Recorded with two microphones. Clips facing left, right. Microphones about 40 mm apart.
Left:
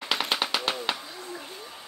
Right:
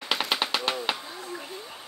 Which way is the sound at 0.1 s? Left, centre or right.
Centre.